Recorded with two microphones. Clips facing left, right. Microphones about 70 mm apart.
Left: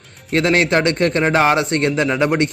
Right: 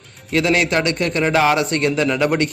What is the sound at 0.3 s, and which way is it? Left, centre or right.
A man's voice, left.